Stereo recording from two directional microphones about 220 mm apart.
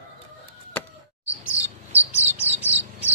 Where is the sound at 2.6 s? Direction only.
10° right (ahead or behind).